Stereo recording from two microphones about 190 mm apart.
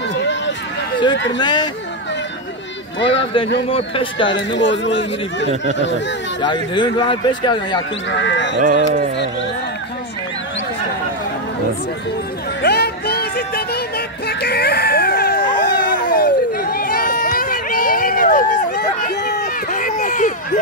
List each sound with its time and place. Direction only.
0.1 s a sound: 70° left (ahead or behind)
1.1 s a man's voice: 70° left (ahead or behind)
1.4 s speech: 25° left (ahead or behind)
3.6 s speech: 30° left (ahead or behind)
4.4 s a man's voice: 70° left (ahead or behind)
6.4 s speech: 25° left (ahead or behind)
8.1 s a man's voice: 70° left (ahead or behind)
8.6 s speech: 45° right (ahead or behind)
12.6 s music: 60° left (ahead or behind)
15.6 s a sound: 45° left (ahead or behind)
19.7 s a sound: 40° left (ahead or behind)